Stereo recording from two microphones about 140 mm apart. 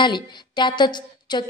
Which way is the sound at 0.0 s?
35° left (ahead or behind).